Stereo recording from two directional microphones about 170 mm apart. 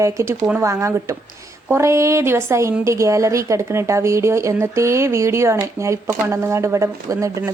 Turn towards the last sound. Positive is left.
turn(degrees=-15)  # may be behind; listen again after turning